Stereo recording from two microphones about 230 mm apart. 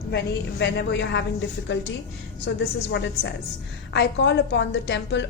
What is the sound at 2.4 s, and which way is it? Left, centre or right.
A woman's voice, left.